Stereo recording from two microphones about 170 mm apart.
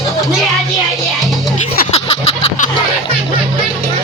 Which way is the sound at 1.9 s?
35° left (ahead or behind).